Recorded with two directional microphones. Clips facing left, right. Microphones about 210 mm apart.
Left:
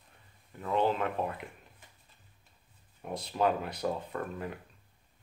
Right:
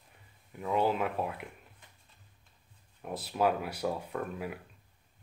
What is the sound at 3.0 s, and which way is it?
Speech, 5° right (ahead or behind).